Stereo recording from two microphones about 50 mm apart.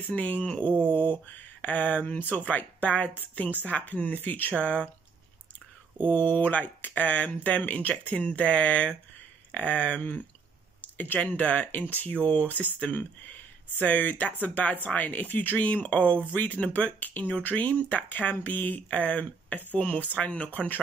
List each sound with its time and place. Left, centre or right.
0.0 s speech: left
6.0 s speech: left